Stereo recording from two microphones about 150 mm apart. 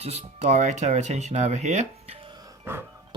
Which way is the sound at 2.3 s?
20° right (ahead or behind).